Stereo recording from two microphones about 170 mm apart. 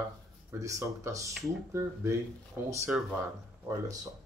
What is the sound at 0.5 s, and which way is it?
Speech, 15° right (ahead or behind).